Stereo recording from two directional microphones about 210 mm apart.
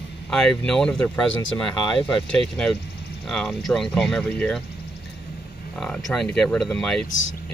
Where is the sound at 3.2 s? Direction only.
Centre (ahead or behind).